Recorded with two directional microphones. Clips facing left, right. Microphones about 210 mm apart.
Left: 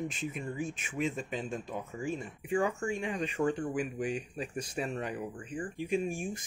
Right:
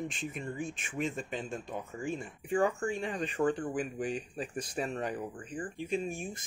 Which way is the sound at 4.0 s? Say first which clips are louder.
Left 1 dB; 35° right (ahead or behind).